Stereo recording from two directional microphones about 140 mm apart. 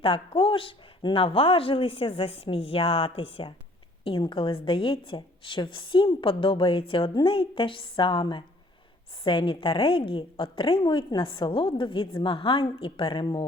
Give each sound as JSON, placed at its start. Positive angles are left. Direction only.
{"t": 0.0, "sound": "a woman's voice", "side_deg": 40}